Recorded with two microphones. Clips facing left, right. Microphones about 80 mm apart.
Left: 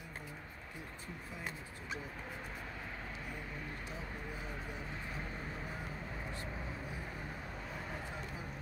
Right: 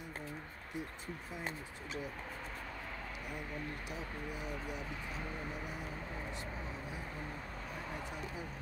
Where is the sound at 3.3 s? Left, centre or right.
Centre.